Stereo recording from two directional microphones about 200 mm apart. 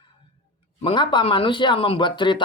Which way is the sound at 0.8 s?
25° left (ahead or behind).